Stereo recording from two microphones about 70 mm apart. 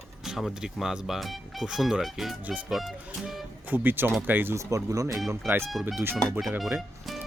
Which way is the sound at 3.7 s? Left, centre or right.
Right.